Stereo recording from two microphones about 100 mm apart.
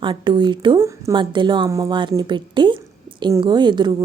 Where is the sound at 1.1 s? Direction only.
50° right (ahead or behind).